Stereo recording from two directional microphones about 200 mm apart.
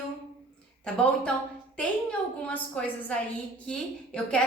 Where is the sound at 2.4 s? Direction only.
5° left (ahead or behind).